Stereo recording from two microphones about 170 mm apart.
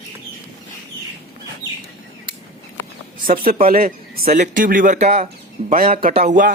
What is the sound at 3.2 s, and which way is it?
A man's voice, 55° right (ahead or behind).